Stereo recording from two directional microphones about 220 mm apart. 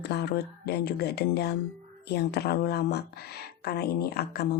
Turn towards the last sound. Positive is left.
turn(degrees=45)  # may be behind; listen again after turning